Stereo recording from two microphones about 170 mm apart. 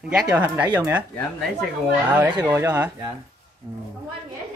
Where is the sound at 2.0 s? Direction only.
5° right (ahead or behind); by 3.8 s 25° right (ahead or behind).